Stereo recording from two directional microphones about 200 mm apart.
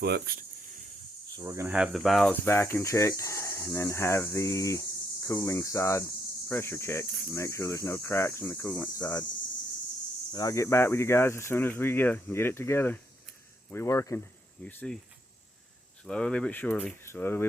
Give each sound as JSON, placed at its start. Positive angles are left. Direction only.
{"t": 0.0, "sound": "speech", "side_deg": -50}
{"t": 1.4, "sound": "cricket", "side_deg": -15}
{"t": 10.3, "sound": "cricket", "side_deg": 15}
{"t": 16.0, "sound": "speech", "side_deg": 5}
{"t": 17.0, "sound": "cricket", "side_deg": 10}